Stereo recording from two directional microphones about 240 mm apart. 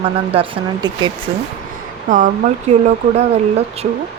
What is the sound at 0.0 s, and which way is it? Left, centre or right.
Speech, right.